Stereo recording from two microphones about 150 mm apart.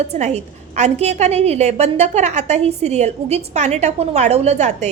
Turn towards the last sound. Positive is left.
turn(degrees=-50)  # may be behind; listen again after turning